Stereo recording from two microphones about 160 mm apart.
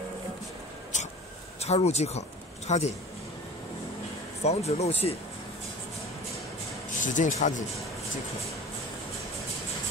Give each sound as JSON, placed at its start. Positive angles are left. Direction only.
{"t": 0.9, "sound": "a sound", "side_deg": 50}
{"t": 1.6, "sound": "speech", "side_deg": 40}
{"t": 4.4, "sound": "speech", "side_deg": 40}
{"t": 7.0, "sound": "speech", "side_deg": 50}